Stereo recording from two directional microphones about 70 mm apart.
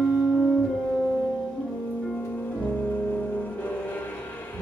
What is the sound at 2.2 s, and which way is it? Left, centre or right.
Music, left.